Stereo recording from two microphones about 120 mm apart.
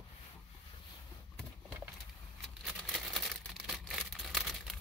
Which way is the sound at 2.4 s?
Centre (ahead or behind).